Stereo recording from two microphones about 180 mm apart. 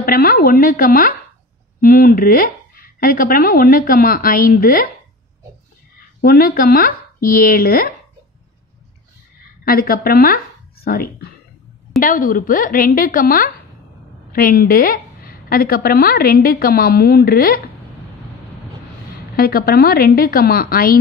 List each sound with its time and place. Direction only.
0.0 s a woman's voice: 55° left (ahead or behind)
6.2 s speech: 55° left (ahead or behind)
9.7 s a woman's voice: 55° left (ahead or behind)
19.3 s a woman's voice: 55° left (ahead or behind)